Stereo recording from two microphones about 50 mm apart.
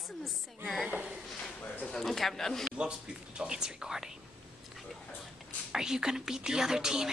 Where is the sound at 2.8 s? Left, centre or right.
Centre.